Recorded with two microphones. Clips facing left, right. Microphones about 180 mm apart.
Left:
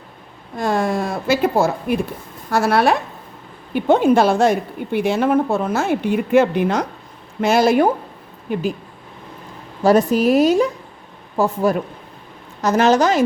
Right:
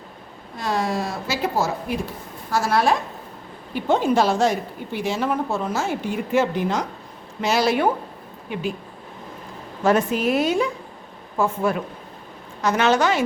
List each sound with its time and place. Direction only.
0.5 s a woman's voice: 50° left (ahead or behind)
7.4 s speech: 50° left (ahead or behind)
9.8 s a woman's voice: 40° left (ahead or behind)